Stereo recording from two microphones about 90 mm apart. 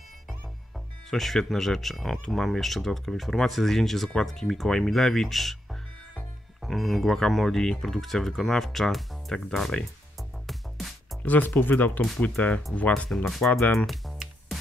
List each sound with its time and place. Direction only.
0.3 s speech: centre (ahead or behind)
11.2 s speech: 20° left (ahead or behind)
13.1 s speech: 5° left (ahead or behind)
13.5 s music: 5° left (ahead or behind)